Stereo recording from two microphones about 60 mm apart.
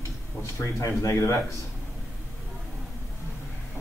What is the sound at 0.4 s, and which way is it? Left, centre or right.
Speech, left.